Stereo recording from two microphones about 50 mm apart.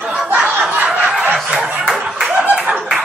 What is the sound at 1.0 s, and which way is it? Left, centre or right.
Snicker, centre.